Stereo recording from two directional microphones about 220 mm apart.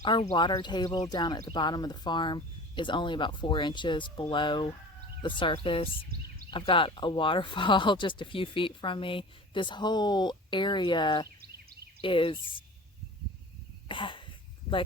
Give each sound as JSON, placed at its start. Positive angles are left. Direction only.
{"t": 0.0, "sound": "speech", "side_deg": 20}
{"t": 13.8, "sound": "cough", "side_deg": 25}